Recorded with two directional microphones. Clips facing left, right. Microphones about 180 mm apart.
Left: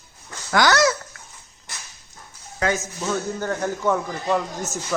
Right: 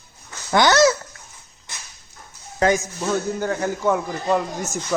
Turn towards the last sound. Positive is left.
turn(degrees=-10)  # may be behind; listen again after turning